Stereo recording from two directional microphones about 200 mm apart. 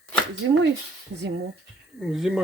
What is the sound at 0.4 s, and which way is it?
Speech, 65° right (ahead or behind).